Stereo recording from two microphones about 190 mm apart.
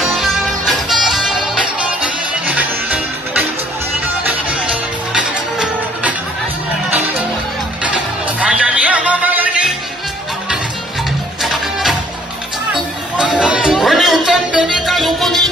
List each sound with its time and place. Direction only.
0.0 s music: centre (ahead or behind)
11.4 s music: centre (ahead or behind)
13.2 s music: 5° right (ahead or behind)